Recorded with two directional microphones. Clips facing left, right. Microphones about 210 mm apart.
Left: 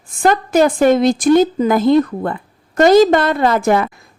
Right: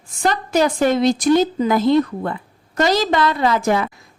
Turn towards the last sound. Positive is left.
turn(degrees=55)  # may be behind; listen again after turning